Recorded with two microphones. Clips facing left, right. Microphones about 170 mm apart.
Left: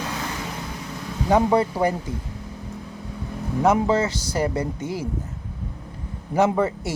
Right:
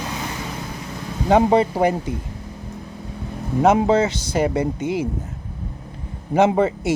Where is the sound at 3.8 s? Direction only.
20° right (ahead or behind).